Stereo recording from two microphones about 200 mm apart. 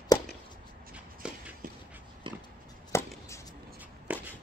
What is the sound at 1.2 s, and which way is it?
Walk, 5° right (ahead or behind).